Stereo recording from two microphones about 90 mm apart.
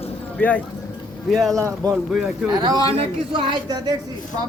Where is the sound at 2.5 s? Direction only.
55° right (ahead or behind).